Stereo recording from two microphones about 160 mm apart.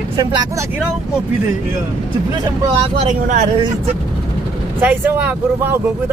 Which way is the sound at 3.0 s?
50° right (ahead or behind).